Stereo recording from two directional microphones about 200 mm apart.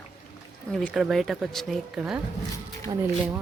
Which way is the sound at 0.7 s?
5° left (ahead or behind).